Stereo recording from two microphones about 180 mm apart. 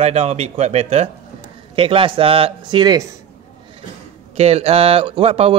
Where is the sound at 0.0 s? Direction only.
35° right (ahead or behind).